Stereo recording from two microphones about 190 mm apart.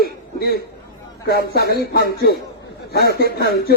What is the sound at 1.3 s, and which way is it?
Speech, 55° left (ahead or behind).